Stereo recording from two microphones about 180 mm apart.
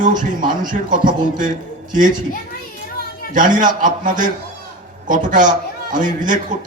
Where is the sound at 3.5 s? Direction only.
45° right (ahead or behind).